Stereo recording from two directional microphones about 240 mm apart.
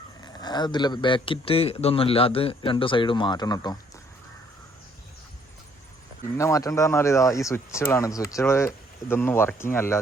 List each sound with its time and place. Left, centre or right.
0.2 s speech: centre
6.3 s speech: centre